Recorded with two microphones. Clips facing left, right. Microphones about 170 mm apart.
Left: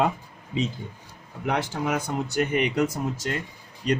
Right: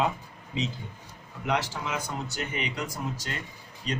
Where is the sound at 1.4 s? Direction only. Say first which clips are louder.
Left 3 dB; 55° left (ahead or behind).